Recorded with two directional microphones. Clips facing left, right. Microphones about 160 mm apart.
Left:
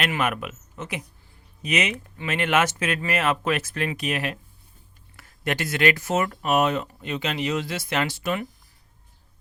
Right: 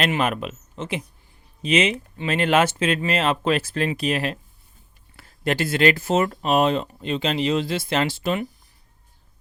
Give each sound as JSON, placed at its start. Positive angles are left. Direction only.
{"t": 0.0, "sound": "speech", "side_deg": -30}